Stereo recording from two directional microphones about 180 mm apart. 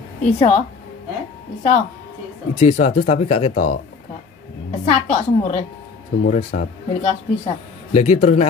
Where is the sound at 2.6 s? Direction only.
40° left (ahead or behind).